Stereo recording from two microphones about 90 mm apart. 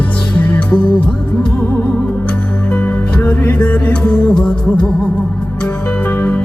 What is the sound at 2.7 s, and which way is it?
Music, 20° left (ahead or behind).